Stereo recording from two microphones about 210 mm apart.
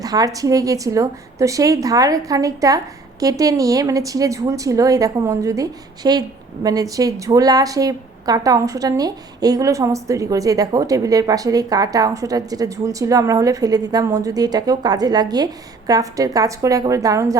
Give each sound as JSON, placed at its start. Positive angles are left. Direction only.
{"t": 0.0, "sound": "speech", "side_deg": -15}